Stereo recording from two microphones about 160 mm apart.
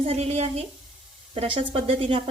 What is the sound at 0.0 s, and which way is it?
A woman's voice, 40° right (ahead or behind).